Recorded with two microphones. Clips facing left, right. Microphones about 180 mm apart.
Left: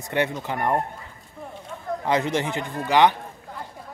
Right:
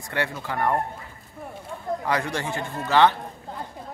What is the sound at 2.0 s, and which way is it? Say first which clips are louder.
Speech: left 5 dB; 20° left (ahead or behind).